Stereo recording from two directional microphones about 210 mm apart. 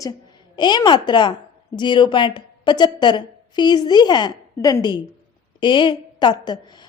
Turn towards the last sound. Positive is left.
turn(degrees=20)  # may be behind; listen again after turning